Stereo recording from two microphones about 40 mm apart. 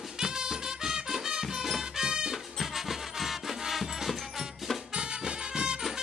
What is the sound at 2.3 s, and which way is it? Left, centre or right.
Music, centre.